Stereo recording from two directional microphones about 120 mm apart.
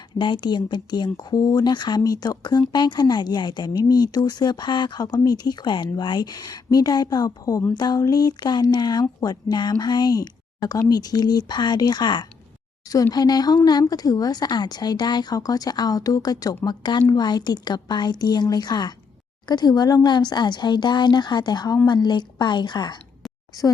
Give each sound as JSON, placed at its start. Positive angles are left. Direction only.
{"t": 0.2, "sound": "speech", "side_deg": 40}